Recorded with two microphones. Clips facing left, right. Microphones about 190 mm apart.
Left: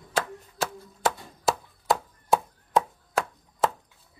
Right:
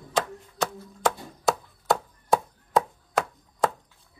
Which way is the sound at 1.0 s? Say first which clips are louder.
Right 1 dB; centre (ahead or behind).